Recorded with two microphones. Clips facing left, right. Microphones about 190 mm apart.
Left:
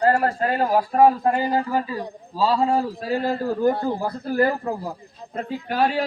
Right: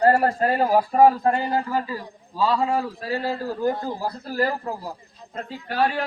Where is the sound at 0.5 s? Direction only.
Centre (ahead or behind).